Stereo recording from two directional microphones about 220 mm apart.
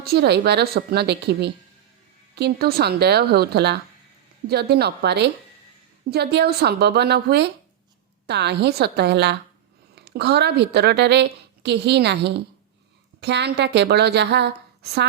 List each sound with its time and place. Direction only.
0.0 s a woman's voice: 45° right (ahead or behind)